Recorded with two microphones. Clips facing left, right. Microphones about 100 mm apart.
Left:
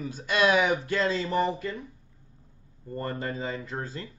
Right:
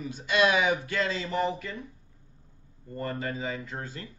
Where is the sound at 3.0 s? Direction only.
35° left (ahead or behind).